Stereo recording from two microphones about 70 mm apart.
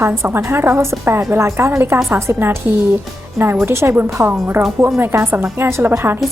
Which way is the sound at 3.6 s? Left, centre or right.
Right.